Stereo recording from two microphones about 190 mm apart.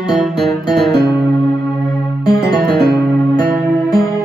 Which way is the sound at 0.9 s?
20° left (ahead or behind).